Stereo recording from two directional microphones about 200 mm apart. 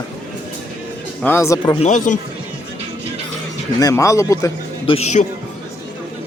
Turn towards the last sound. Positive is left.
turn(degrees=35)  # may be behind; listen again after turning